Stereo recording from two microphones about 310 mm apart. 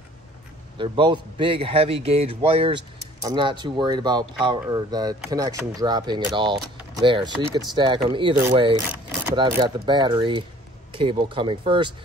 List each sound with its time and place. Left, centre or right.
0.7 s speech: centre